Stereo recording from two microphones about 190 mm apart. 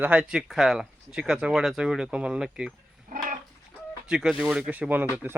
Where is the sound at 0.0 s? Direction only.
5° right (ahead or behind).